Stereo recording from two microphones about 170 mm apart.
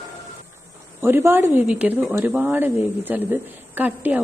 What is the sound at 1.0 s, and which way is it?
A woman's voice, 15° right (ahead or behind).